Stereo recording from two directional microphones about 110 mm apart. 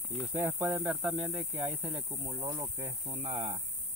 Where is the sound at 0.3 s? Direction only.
15° right (ahead or behind).